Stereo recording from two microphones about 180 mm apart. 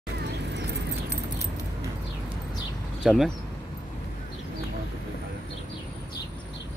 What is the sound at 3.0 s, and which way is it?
Speech, 5° right (ahead or behind).